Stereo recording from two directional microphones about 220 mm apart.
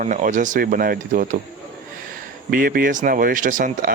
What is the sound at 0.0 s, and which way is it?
Speech, 35° right (ahead or behind).